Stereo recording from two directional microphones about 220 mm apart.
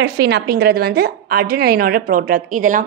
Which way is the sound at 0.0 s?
50° right (ahead or behind).